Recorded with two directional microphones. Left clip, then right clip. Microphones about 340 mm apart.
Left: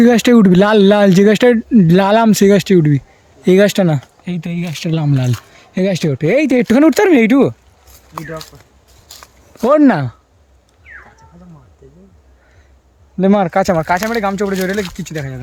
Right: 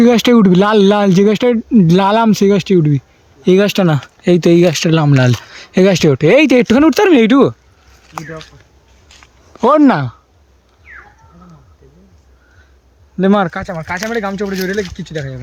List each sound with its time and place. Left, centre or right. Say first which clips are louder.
0.0 s speech: even; centre
8.2 s speech: left 2 dB; centre
9.1 s a sound: left 5 dB; centre
9.6 s speech: right 1 dB; centre
13.1 s speech: even; centre
13.5 s speech: left 8 dB; centre